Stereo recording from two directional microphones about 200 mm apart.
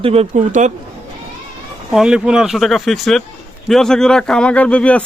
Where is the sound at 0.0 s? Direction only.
30° right (ahead or behind).